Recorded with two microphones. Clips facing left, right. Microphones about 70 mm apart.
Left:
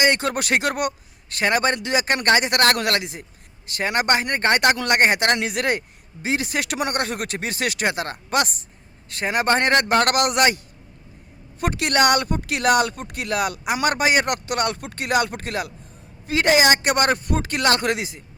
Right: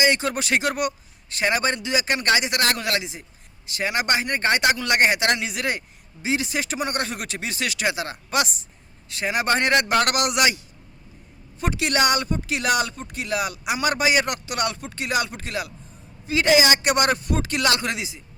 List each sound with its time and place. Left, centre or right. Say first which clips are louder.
0.0 s speech: left 1 dB; left
11.6 s speech: left 3 dB; left